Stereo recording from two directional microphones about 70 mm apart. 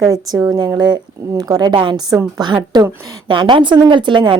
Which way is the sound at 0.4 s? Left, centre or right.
Right.